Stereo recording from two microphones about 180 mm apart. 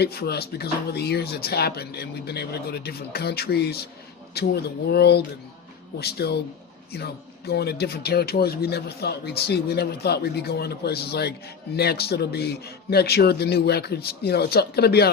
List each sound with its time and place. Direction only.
0.0 s speech: 65° left (ahead or behind)